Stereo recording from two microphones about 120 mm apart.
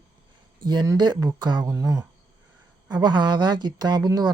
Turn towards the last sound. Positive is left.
turn(degrees=-30)  # may be behind; listen again after turning